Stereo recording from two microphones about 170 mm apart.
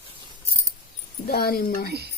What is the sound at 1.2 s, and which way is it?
Speech, 65° left (ahead or behind).